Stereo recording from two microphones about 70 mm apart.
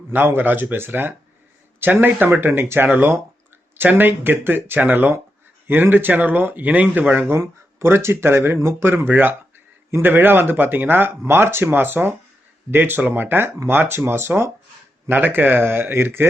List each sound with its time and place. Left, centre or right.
0.1 s speech: right
7.3 s speech: right